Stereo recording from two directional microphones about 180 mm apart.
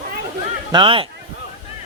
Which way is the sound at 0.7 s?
30° right (ahead or behind).